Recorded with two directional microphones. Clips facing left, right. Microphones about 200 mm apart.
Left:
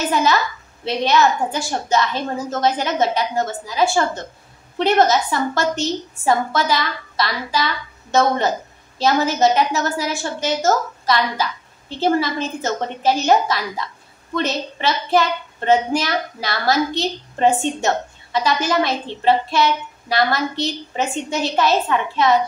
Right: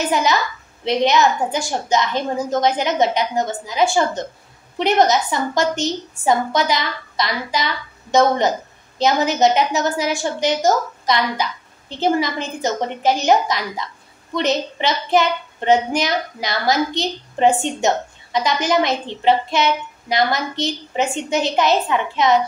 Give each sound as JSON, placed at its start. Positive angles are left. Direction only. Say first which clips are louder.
{"t": 0.0, "sound": "a woman's voice", "louder": "even", "side_deg": -15}